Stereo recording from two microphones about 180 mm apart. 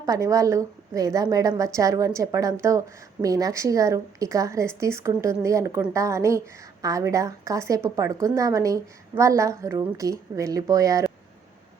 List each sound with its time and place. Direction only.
0.0 s a woman's voice: 20° right (ahead or behind)